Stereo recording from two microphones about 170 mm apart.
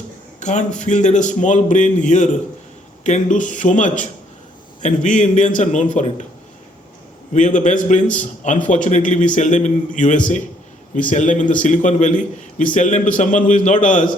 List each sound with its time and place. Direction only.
0.3 s a man's voice: 45° left (ahead or behind)
7.3 s a man's voice: 45° left (ahead or behind)